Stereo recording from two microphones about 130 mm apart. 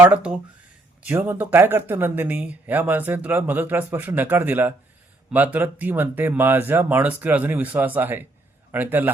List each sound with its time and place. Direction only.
0.0 s speech: 10° right (ahead or behind)